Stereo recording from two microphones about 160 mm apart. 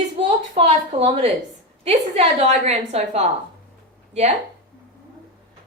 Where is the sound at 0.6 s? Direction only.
35° right (ahead or behind).